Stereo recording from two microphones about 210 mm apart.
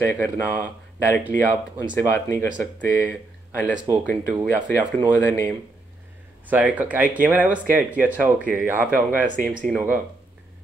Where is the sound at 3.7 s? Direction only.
15° right (ahead or behind).